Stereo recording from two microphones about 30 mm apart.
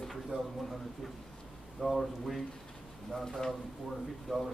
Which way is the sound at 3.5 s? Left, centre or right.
Centre.